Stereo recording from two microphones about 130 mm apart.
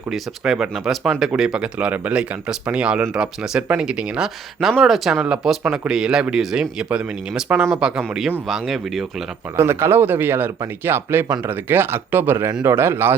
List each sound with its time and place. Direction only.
0.1 s speech: 5° right (ahead or behind)
9.6 s speech: 20° right (ahead or behind)